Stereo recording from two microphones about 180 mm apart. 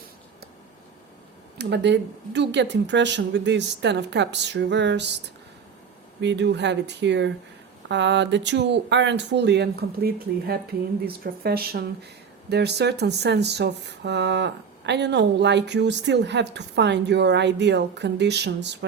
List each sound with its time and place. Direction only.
1.5 s speech: 75° right (ahead or behind)
6.2 s speech: 75° right (ahead or behind); by 11.9 s 60° right (ahead or behind)
12.5 s speech: 70° right (ahead or behind)